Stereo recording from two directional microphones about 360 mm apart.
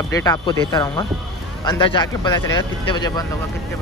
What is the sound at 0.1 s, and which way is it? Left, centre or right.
Speech, centre.